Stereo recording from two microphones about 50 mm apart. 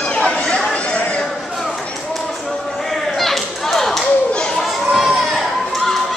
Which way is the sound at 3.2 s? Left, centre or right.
Centre.